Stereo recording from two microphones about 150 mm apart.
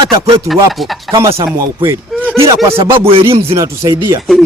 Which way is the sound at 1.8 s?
15° right (ahead or behind).